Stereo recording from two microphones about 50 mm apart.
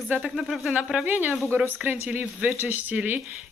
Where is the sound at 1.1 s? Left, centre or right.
Right.